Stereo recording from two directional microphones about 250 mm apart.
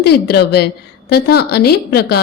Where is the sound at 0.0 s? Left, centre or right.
Left.